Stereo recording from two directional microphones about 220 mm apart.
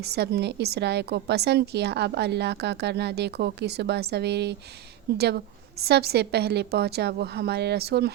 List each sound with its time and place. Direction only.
0.0 s a woman's voice: 50° right (ahead or behind)